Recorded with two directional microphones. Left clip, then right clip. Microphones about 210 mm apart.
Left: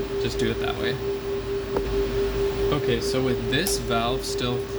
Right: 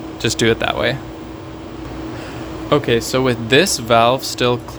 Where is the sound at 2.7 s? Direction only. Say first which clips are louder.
Right 8 dB; 55° right (ahead or behind).